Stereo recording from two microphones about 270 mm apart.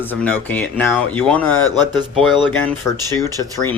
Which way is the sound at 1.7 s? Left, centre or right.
Centre.